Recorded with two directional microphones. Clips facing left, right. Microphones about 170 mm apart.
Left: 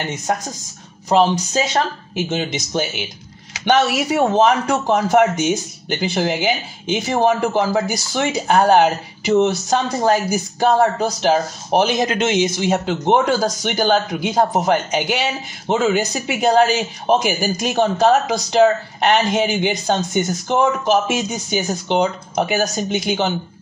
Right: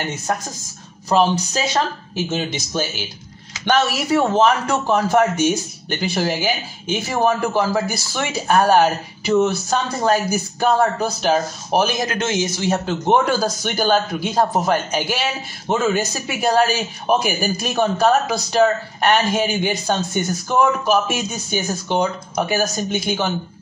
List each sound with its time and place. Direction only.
1.0 s speech: 20° left (ahead or behind)